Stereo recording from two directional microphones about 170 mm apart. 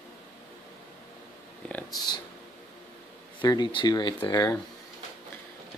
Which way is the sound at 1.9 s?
25° left (ahead or behind).